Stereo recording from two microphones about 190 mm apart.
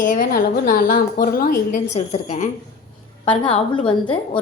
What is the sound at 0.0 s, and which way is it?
A woman's voice, 45° left (ahead or behind).